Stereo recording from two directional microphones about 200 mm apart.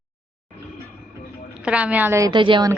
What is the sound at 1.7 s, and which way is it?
Speech, 10° right (ahead or behind).